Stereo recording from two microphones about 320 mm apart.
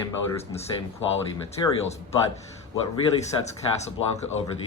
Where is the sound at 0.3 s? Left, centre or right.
Centre.